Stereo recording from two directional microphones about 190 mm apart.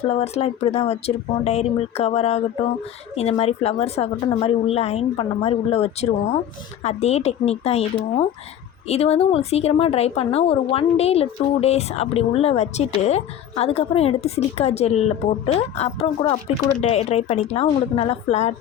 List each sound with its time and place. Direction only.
0.0 s a woman's voice: 35° left (ahead or behind)